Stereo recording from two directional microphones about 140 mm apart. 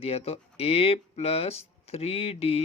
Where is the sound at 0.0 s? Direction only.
45° left (ahead or behind).